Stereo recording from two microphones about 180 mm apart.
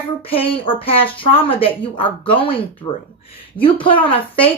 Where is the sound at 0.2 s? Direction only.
30° left (ahead or behind).